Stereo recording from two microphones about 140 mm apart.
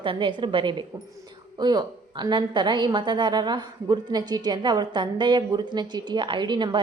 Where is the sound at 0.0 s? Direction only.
35° right (ahead or behind).